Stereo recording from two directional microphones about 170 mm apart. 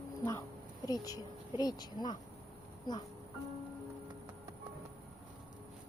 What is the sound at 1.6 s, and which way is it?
Speech, 25° left (ahead or behind).